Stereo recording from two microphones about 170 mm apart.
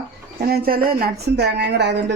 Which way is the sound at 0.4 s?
65° right (ahead or behind).